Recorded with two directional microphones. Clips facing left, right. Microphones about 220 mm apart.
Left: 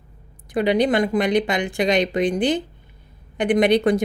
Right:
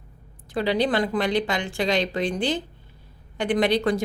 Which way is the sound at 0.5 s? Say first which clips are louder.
Left 4 dB; 15° left (ahead or behind).